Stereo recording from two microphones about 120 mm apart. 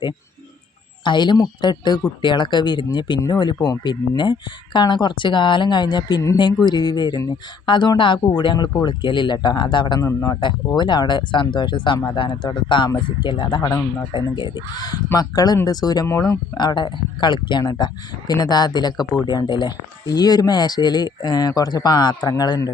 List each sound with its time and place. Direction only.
1.0 s speech: 40° left (ahead or behind)
10.0 s speech: 25° left (ahead or behind)
10.8 s speech: 40° left (ahead or behind); by 16.4 s 25° left (ahead or behind)
16.6 s speech: 35° left (ahead or behind)